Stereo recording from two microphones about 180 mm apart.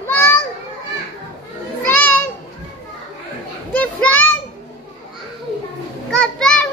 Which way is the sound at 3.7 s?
10° left (ahead or behind).